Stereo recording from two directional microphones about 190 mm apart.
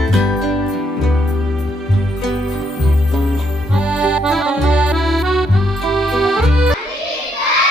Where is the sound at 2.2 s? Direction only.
Centre (ahead or behind).